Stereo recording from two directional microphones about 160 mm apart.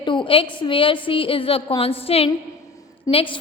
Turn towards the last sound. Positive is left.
turn(degrees=20)  # may be behind; listen again after turning